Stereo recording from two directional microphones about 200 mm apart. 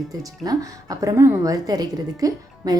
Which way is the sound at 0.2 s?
15° right (ahead or behind).